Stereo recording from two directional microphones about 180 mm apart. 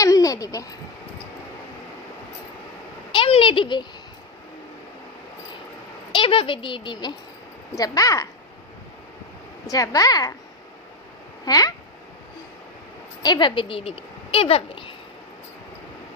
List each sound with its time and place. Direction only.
0.0 s a sound: 20° left (ahead or behind)
3.1 s a sound: 30° left (ahead or behind)
6.1 s speech: 30° left (ahead or behind)
9.6 s speech: 20° left (ahead or behind)
11.4 s speech: 20° left (ahead or behind)
13.2 s speech: 25° left (ahead or behind)